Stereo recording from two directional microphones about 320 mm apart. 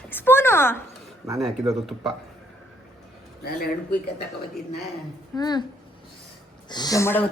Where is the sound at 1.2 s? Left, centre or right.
Centre.